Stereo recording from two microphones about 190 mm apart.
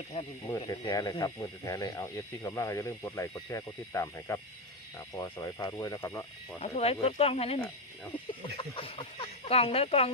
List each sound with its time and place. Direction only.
0.4 s speech: 20° left (ahead or behind)
6.6 s speech: 30° left (ahead or behind)